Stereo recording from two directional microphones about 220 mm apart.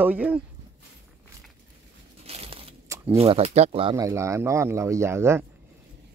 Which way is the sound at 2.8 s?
15° right (ahead or behind).